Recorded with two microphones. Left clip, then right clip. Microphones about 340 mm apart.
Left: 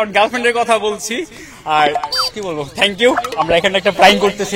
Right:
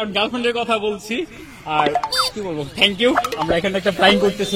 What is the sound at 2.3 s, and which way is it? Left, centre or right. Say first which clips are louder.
Speech: left 4 dB; left.